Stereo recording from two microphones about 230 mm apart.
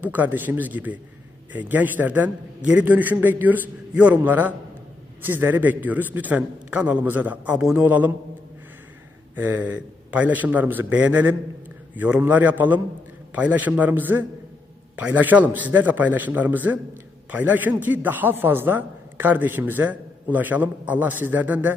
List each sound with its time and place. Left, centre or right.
0.0 s speech: centre
9.3 s speech: centre